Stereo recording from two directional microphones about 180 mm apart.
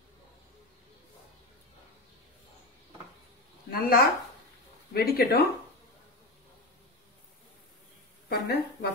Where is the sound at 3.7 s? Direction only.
55° left (ahead or behind).